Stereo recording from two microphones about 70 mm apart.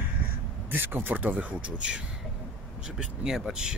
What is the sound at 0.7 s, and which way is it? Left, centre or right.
Speech, right.